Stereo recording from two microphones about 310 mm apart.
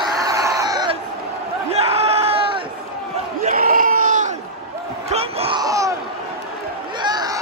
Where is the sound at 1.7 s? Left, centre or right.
Centre.